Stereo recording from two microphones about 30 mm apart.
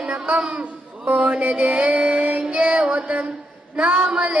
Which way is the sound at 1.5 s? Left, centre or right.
Right.